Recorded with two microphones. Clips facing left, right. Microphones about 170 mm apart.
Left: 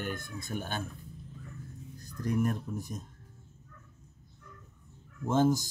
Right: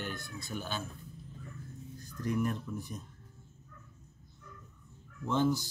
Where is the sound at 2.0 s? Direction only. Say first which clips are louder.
Left 2 dB; 40° left (ahead or behind).